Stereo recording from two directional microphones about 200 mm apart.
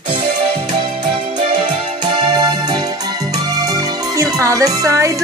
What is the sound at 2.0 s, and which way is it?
Music, 20° right (ahead or behind).